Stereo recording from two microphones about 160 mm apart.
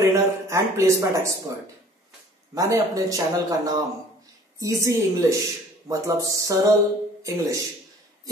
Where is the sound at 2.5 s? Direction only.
20° right (ahead or behind).